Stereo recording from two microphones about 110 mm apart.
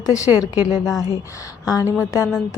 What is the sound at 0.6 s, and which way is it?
Speech, 10° right (ahead or behind).